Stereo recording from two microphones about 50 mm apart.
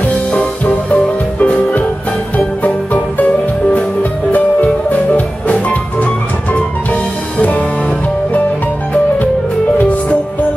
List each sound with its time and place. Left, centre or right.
0.3 s music: left
6.5 s music: left